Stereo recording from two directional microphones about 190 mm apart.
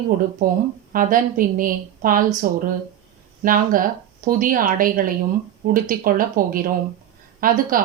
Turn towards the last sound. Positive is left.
turn(degrees=-45)  # may be behind; listen again after turning